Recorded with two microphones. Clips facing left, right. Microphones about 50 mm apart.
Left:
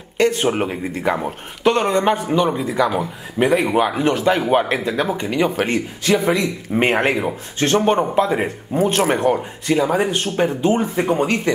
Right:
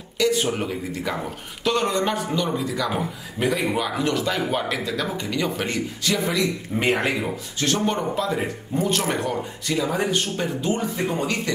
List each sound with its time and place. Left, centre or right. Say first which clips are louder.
0.2 s speech: left 5 dB; left
6.7 s speech: left 7 dB; left